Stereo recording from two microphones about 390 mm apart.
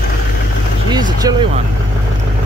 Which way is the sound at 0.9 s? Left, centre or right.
Centre.